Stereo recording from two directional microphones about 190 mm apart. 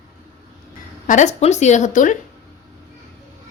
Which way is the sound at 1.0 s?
40° left (ahead or behind).